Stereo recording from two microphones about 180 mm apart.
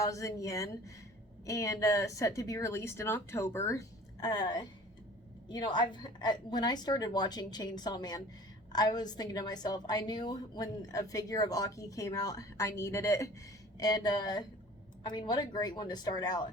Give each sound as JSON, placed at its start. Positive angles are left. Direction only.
{"t": 0.0, "sound": "a woman's voice", "side_deg": 15}